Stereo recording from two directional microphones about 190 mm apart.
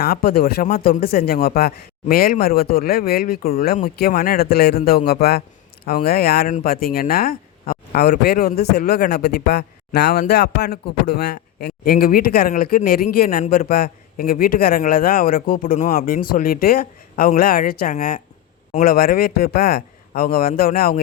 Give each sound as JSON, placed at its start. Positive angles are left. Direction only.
{"t": 0.0, "sound": "a man's voice", "side_deg": 55}